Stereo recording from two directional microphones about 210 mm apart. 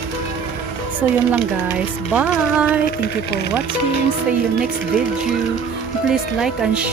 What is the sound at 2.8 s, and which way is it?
Speech, 50° left (ahead or behind).